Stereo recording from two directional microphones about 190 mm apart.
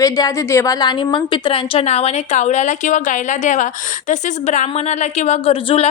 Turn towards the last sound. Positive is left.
turn(degrees=30)  # may be behind; listen again after turning